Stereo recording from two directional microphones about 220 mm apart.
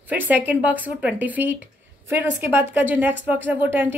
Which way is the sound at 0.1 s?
10° right (ahead or behind).